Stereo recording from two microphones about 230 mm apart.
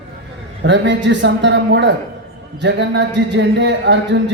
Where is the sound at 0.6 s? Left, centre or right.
Right.